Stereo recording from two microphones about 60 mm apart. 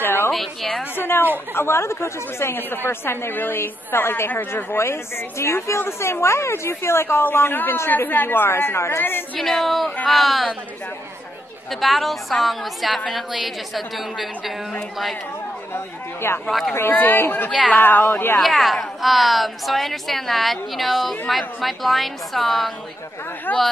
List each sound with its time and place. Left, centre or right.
0.0 s a sound: left
0.3 s a woman's voice: centre
0.9 s a woman's voice: left
9.4 s a woman's voice: centre
11.7 s a woman's voice: centre
15.7 s a woman's voice: left
16.4 s a woman's voice: centre
16.9 s a woman's voice: left
17.5 s a woman's voice: centre
17.7 s a woman's voice: left
18.4 s a woman's voice: centre
23.5 s a woman's voice: left